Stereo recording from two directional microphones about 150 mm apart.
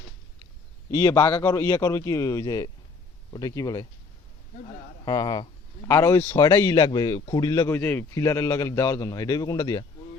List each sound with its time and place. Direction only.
0.9 s a man's voice: 20° left (ahead or behind)
5.0 s a man's voice: 25° left (ahead or behind)
7.8 s a man's voice: 15° left (ahead or behind)